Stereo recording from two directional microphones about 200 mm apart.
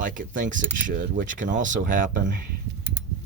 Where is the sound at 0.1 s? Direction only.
40° right (ahead or behind).